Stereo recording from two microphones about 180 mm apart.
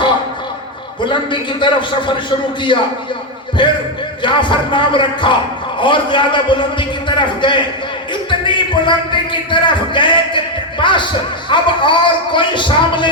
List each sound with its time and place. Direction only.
1.0 s a man's voice: 25° left (ahead or behind)